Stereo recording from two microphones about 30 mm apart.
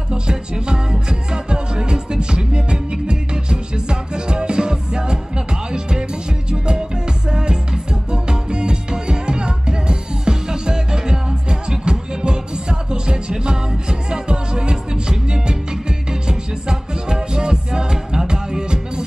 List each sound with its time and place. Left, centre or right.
0.1 s music: right